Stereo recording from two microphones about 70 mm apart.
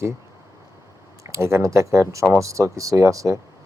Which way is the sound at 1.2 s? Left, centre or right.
Right.